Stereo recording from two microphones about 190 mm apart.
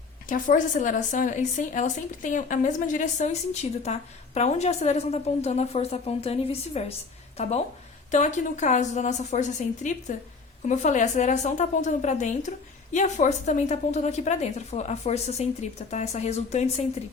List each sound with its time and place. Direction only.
0.3 s speech: 45° left (ahead or behind)
8.1 s speech: 40° left (ahead or behind)